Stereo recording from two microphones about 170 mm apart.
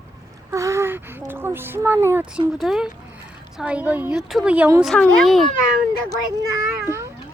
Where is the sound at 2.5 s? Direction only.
Centre (ahead or behind).